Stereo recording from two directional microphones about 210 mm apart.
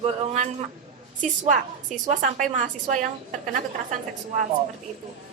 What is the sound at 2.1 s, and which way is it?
Speech, 40° right (ahead or behind).